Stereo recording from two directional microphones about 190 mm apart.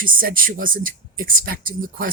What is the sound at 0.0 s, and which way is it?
Speech, 45° right (ahead or behind).